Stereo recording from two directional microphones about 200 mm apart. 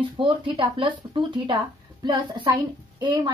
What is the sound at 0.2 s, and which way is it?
Speech, 25° right (ahead or behind).